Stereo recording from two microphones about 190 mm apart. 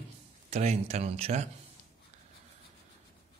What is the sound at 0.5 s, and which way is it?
Speech, 35° right (ahead or behind).